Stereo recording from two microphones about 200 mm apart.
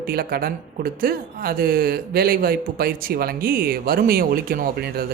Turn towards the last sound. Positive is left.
turn(degrees=-45)  # may be behind; listen again after turning